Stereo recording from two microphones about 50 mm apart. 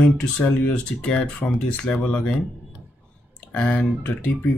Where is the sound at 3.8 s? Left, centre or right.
Left.